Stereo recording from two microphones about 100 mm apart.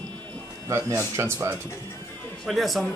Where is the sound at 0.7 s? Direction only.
30° right (ahead or behind).